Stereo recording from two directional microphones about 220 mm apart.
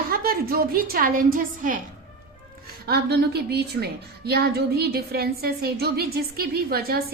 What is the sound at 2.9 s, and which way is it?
A woman's voice, 45° right (ahead or behind).